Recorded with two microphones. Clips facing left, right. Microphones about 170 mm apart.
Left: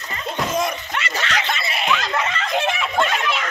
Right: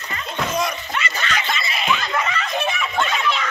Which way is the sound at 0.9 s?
75° left (ahead or behind).